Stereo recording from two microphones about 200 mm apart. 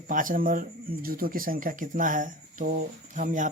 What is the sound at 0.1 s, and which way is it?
Speech, 40° right (ahead or behind).